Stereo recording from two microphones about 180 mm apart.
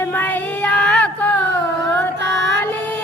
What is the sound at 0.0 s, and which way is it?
Child singing, 10° left (ahead or behind).